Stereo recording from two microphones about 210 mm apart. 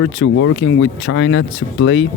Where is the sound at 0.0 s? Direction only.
70° left (ahead or behind).